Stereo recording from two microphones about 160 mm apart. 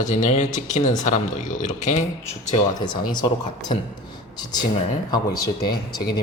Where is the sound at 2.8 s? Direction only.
30° left (ahead or behind).